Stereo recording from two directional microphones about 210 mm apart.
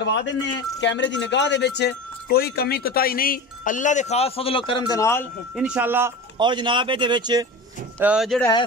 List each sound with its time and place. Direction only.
0.0 s speech: 60° left (ahead or behind); by 5.2 s 15° left (ahead or behind)
5.6 s speech: 5° right (ahead or behind)
6.3 s speech: 20° right (ahead or behind)
8.0 s speech: 5° right (ahead or behind)